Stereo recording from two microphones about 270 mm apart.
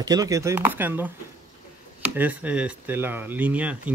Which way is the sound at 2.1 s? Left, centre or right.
Centre.